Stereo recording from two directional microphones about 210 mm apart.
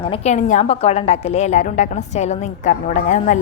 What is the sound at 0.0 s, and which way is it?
A woman's voice, 30° left (ahead or behind).